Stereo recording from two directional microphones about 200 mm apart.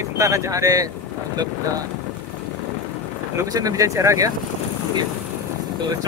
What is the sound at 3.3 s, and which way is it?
Speech, 20° right (ahead or behind).